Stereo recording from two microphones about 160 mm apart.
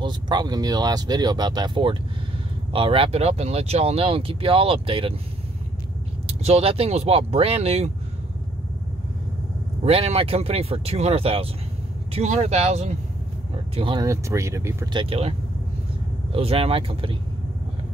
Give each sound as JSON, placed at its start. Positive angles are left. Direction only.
{"t": 0.0, "sound": "speech", "side_deg": -25}
{"t": 6.2, "sound": "speech", "side_deg": -40}
{"t": 9.8, "sound": "speech", "side_deg": -40}
{"t": 13.7, "sound": "speech", "side_deg": -30}
{"t": 14.0, "sound": "speech", "side_deg": -20}
{"t": 14.9, "sound": "speech", "side_deg": -35}